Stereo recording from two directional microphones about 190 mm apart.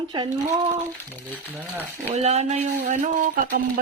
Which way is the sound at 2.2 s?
35° right (ahead or behind).